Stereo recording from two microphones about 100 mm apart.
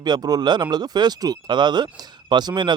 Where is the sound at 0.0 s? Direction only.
45° right (ahead or behind).